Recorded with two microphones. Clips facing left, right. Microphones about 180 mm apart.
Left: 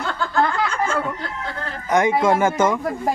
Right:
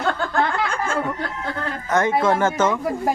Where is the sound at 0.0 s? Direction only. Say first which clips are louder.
Right 3 dB; 55° right (ahead or behind).